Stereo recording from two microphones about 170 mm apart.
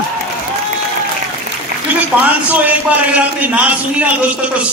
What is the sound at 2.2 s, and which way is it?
A man's voice, 10° right (ahead or behind).